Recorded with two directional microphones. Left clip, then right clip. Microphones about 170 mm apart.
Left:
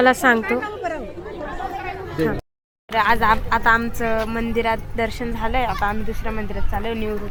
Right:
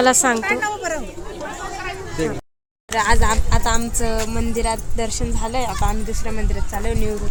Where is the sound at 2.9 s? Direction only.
25° right (ahead or behind).